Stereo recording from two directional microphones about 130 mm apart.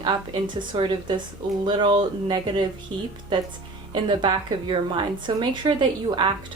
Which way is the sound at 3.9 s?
35° right (ahead or behind).